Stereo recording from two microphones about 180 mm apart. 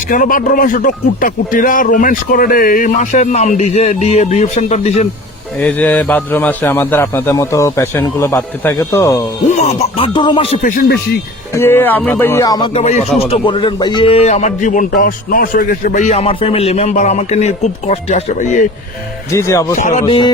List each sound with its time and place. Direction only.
0.1 s speech: 50° left (ahead or behind)
5.5 s a man's voice: 10° left (ahead or behind)
9.5 s a man's voice: 40° left (ahead or behind)
11.5 s a man's voice: 15° left (ahead or behind)
12.8 s a man's voice: 40° left (ahead or behind)
19.3 s a man's voice: 15° left (ahead or behind)
19.7 s speech: 45° left (ahead or behind)
20.1 s music: 30° left (ahead or behind)